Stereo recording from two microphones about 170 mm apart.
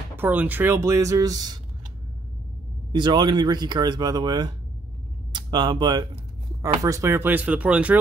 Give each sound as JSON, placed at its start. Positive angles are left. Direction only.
{"t": 0.1, "sound": "speech", "side_deg": -10}
{"t": 2.9, "sound": "speech", "side_deg": -25}